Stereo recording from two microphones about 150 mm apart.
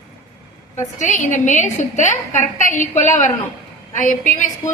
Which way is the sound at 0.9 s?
55° left (ahead or behind).